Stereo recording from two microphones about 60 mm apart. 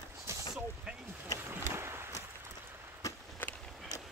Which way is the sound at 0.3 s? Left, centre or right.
Right.